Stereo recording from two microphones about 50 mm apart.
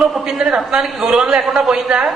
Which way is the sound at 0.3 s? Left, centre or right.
Centre.